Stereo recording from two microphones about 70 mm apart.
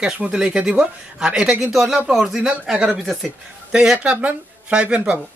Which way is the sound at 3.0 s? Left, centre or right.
Centre.